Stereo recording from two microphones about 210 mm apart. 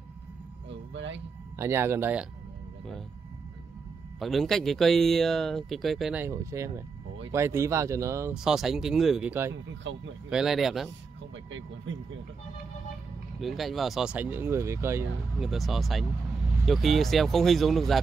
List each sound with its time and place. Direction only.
0.7 s a sound: 60° right (ahead or behind)
1.6 s speech: 10° right (ahead or behind)
4.2 s speech: centre (ahead or behind)
8.5 s speech: centre (ahead or behind)
9.9 s speech: 60° right (ahead or behind)
10.3 s speech: centre (ahead or behind)
11.9 s speech: 60° right (ahead or behind)
13.4 s speech: centre (ahead or behind)
15.3 s speech: centre (ahead or behind)